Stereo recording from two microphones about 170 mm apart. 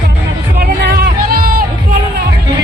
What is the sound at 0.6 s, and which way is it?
Music, 65° right (ahead or behind).